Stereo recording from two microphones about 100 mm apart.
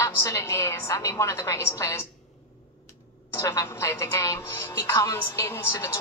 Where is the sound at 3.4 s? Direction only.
35° left (ahead or behind).